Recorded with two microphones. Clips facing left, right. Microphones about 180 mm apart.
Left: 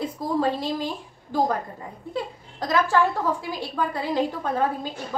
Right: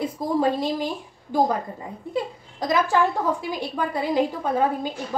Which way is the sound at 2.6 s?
15° right (ahead or behind).